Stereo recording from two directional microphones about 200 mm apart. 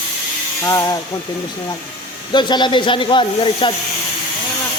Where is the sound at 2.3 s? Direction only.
20° left (ahead or behind).